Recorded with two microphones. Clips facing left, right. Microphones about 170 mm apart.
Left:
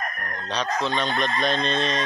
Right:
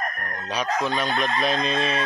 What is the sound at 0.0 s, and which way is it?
Dog, 40° right (ahead or behind).